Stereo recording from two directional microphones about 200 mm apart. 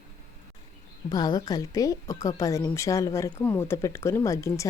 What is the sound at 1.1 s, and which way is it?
Speech, 20° left (ahead or behind).